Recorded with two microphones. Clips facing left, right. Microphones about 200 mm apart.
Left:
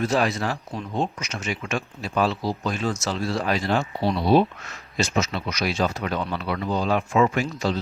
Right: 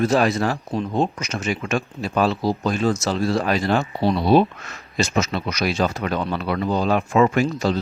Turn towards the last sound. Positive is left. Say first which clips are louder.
# right 5 dB
turn(degrees=-50)  # may be behind; listen again after turning